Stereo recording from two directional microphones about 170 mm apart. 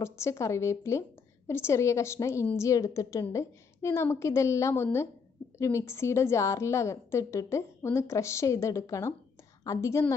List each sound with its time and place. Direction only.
0.0 s a woman's voice: 15° left (ahead or behind)